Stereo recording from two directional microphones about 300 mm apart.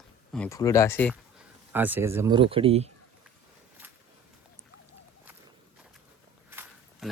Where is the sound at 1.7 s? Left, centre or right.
Centre.